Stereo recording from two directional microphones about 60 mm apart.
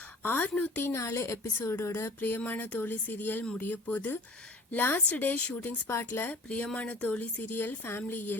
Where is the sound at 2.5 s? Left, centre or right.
Left.